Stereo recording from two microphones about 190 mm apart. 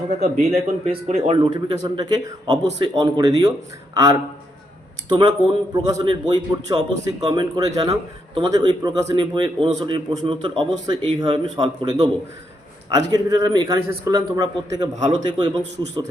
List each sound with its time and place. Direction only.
0.2 s a man's voice: 35° right (ahead or behind)
5.0 s a man's voice: 25° right (ahead or behind)